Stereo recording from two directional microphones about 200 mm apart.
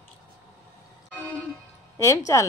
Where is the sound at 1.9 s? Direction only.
15° left (ahead or behind).